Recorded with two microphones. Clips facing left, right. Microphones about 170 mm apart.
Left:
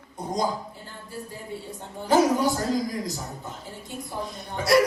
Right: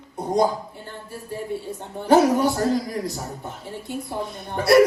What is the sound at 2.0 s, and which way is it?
Speech, 65° right (ahead or behind).